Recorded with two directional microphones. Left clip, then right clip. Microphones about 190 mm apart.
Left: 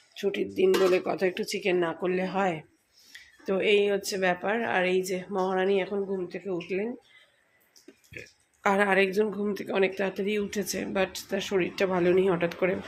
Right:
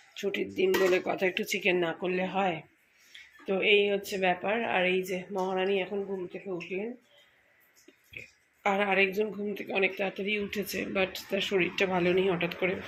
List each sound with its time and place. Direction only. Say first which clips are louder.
0.2 s speech: left 3 dB; 5° left (ahead or behind)
6.2 s speech: left 4 dB; 25° left (ahead or behind)
8.6 s speech: left 3 dB; 20° left (ahead or behind)